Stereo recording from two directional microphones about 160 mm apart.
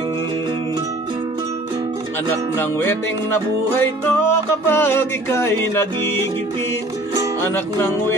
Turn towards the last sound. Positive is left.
turn(degrees=15)  # may be behind; listen again after turning